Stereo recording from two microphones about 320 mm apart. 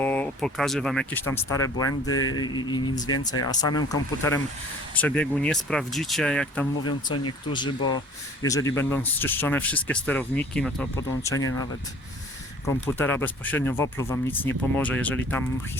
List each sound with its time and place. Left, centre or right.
0.0 s speech: centre
1.9 s speech: left
2.4 s speech: centre
6.8 s speech: left
7.5 s speech: centre
12.6 s speech: centre